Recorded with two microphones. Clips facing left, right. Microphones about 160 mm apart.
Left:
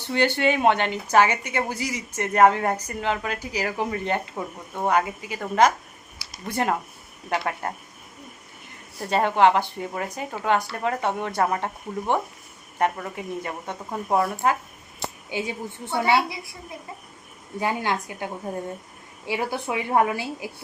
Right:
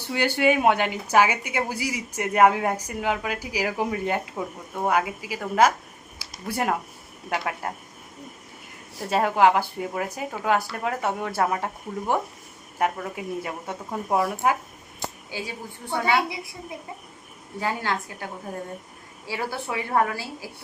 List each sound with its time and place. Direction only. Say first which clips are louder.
0.1 s speech: even; 10° right (ahead or behind)
9.0 s speech: left 1 dB; 5° right (ahead or behind)
15.3 s a woman's voice: left 8 dB; 20° left (ahead or behind)
16.3 s a woman's voice: right 2 dB; 20° right (ahead or behind)
17.6 s a woman's voice: left 2 dB; 15° left (ahead or behind)